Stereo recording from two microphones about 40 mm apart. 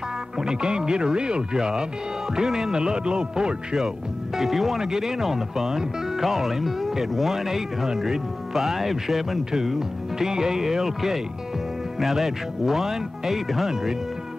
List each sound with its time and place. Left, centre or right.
0.4 s speech: centre
4.4 s speech: centre